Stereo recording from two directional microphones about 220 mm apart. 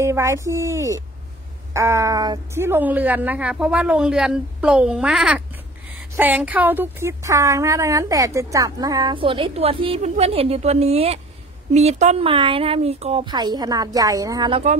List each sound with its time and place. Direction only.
0.0 s a woman's voice: 10° right (ahead or behind)